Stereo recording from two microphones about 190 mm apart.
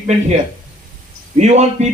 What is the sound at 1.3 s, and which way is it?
Speech, 35° right (ahead or behind).